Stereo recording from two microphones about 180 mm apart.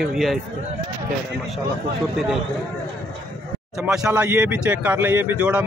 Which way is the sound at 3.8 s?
5° right (ahead or behind).